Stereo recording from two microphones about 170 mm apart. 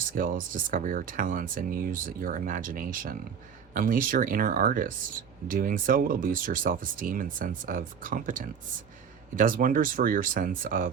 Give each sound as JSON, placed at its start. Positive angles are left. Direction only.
{"t": 0.1, "sound": "speech", "side_deg": -55}